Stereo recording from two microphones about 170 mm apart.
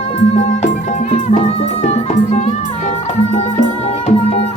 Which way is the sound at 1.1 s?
40° left (ahead or behind).